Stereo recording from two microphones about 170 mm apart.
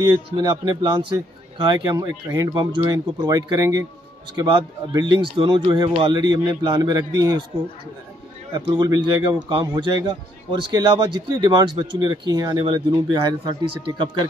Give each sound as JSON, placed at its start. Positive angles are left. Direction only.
{"t": 0.1, "sound": "a man's voice", "side_deg": -25}
{"t": 8.5, "sound": "a man's voice", "side_deg": -25}